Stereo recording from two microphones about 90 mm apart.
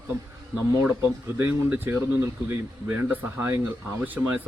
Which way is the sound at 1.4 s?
20° right (ahead or behind).